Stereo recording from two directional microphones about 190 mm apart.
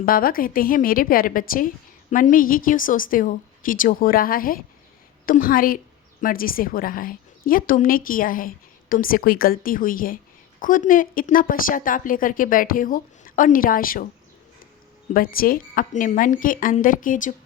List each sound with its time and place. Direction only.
0.0 s a woman's voice: 50° left (ahead or behind)
15.1 s a woman's voice: 50° left (ahead or behind)